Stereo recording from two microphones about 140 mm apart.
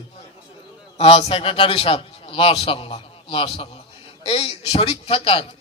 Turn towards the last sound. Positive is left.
turn(degrees=40)  # may be behind; listen again after turning